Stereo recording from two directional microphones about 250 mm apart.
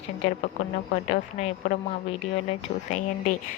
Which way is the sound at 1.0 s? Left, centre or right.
Left.